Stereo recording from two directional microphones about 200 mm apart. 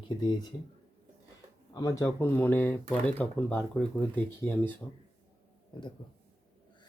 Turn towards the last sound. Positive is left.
turn(degrees=25)  # may be behind; listen again after turning